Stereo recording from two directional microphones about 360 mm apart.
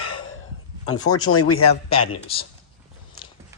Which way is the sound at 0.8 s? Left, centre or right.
Left.